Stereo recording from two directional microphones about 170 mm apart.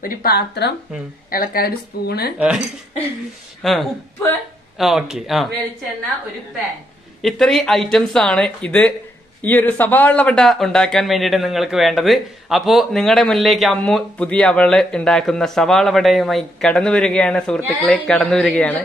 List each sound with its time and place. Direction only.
0.0 s speech: 60° left (ahead or behind)
1.3 s speech: 60° left (ahead or behind)
2.3 s speech: 5° right (ahead or behind)
3.6 s speech: centre (ahead or behind)
7.2 s speech: centre (ahead or behind)